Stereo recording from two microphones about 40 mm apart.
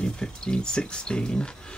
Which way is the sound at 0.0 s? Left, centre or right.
Left.